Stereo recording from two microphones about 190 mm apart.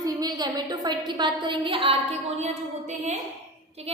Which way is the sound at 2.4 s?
40° right (ahead or behind).